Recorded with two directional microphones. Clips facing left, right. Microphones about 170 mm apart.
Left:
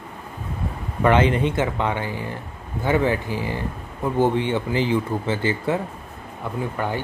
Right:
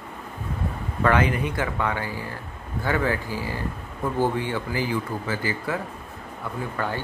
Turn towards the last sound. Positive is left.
turn(degrees=15)  # may be behind; listen again after turning